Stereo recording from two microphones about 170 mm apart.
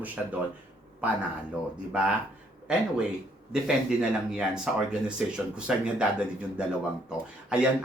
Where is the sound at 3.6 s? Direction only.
5° right (ahead or behind).